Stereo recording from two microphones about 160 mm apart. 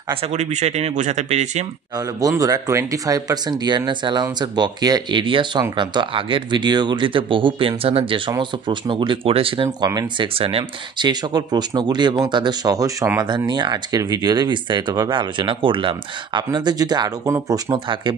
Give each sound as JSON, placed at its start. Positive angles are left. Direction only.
{"t": 0.1, "sound": "speech", "side_deg": -45}
{"t": 2.0, "sound": "speech", "side_deg": -25}